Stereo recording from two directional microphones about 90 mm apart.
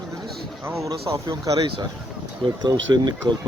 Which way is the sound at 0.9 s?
35° right (ahead or behind).